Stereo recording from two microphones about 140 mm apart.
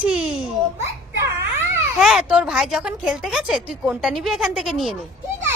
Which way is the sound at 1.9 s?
5° right (ahead or behind).